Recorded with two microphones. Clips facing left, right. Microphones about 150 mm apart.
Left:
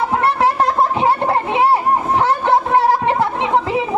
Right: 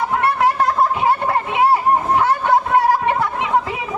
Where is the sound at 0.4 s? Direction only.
25° left (ahead or behind).